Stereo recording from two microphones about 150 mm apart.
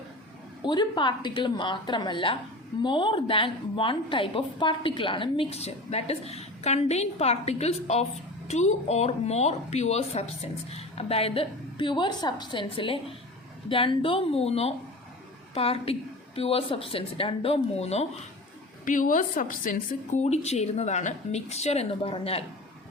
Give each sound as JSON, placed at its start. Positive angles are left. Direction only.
{"t": 0.6, "sound": "a woman's voice", "side_deg": 30}
{"t": 18.9, "sound": "speech", "side_deg": 60}